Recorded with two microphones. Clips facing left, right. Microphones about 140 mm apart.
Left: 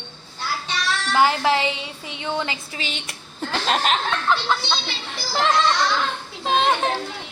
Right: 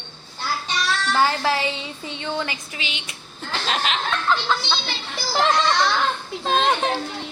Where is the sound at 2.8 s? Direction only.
40° left (ahead or behind).